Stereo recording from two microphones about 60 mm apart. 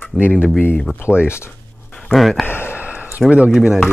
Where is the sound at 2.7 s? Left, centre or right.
Right.